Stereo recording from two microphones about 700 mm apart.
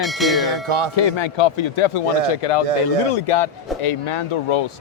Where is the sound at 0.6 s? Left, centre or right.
Right.